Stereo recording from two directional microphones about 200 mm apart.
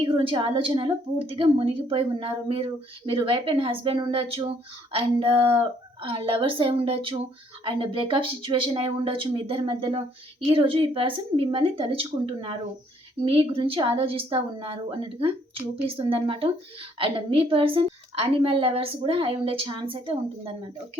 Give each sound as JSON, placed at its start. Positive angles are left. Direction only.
{"t": 0.0, "sound": "a woman's voice", "side_deg": -25}